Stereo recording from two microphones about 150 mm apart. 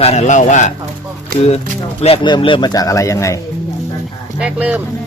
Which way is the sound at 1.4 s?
45° left (ahead or behind).